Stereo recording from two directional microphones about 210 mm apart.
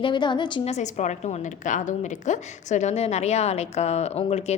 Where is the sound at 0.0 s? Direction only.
20° left (ahead or behind).